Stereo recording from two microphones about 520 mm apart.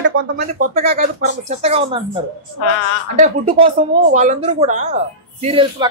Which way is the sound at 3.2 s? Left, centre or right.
Centre.